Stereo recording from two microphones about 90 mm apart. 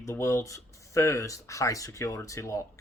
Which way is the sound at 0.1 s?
30° left (ahead or behind).